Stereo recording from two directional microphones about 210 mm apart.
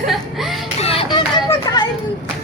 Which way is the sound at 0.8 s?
30° left (ahead or behind).